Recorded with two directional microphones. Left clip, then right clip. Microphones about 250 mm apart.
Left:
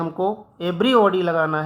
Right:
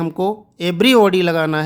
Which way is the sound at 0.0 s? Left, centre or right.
Right.